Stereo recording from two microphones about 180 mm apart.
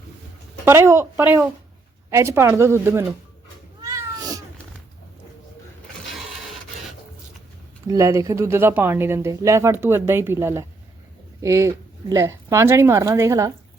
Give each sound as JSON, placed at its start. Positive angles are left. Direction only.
{"t": 0.6, "sound": "speech", "side_deg": -15}
{"t": 3.8, "sound": "cat", "side_deg": -20}
{"t": 7.9, "sound": "speech", "side_deg": -15}